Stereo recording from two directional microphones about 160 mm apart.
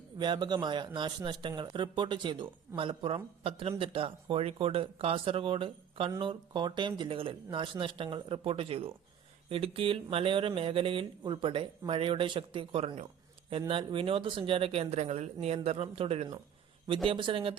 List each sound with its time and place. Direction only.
0.2 s speech: 30° right (ahead or behind)